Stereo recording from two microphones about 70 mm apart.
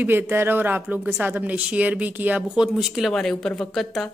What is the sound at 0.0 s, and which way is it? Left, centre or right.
Speech, right.